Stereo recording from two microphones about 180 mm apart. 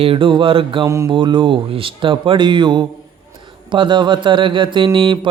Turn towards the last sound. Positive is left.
turn(degrees=-25)  # may be behind; listen again after turning